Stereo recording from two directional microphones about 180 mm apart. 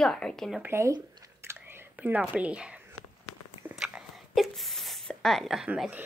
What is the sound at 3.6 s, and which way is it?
Whispering, 10° right (ahead or behind).